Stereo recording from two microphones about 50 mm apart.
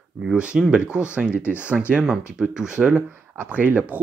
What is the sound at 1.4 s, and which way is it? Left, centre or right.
Speech, left.